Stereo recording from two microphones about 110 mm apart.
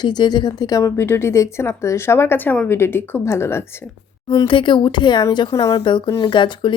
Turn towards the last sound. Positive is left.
turn(degrees=45)  # may be behind; listen again after turning